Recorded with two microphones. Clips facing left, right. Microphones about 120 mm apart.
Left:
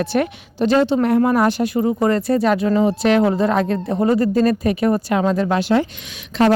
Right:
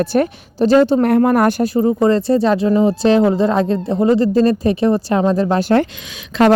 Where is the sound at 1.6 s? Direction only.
35° right (ahead or behind).